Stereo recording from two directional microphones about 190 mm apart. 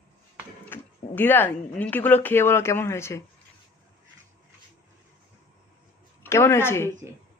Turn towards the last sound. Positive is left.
turn(degrees=15)  # may be behind; listen again after turning